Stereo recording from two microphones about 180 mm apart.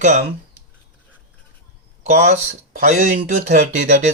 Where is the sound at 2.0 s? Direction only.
40° right (ahead or behind).